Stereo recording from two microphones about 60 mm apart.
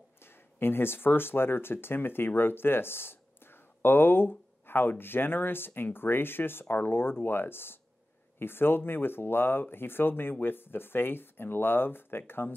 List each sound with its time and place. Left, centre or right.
0.6 s speech: left